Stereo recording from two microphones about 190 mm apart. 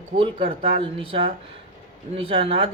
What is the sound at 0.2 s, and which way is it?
Speech, 30° right (ahead or behind).